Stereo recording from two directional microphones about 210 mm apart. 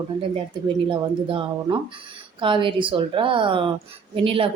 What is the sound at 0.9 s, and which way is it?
Speech, 25° right (ahead or behind).